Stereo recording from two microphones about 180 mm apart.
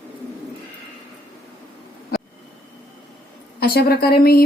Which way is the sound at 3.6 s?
60° left (ahead or behind).